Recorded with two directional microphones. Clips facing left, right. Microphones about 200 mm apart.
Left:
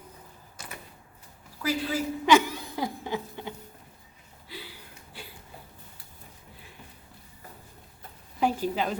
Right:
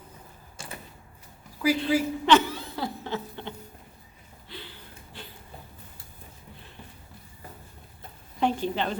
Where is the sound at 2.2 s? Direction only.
10° left (ahead or behind).